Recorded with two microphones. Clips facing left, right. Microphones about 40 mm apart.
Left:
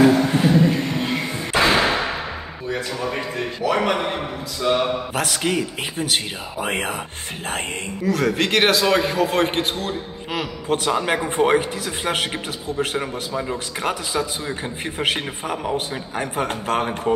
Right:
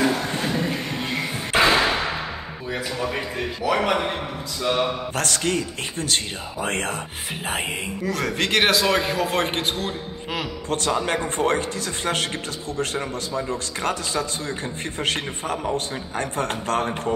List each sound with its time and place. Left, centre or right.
0.0 s a sound: centre
2.7 s a man's voice: centre
7.4 s speech: centre